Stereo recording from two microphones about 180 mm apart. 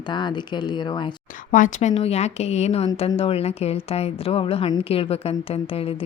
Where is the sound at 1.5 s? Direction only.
45° left (ahead or behind).